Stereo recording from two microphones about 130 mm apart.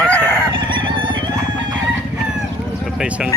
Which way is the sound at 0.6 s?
40° right (ahead or behind).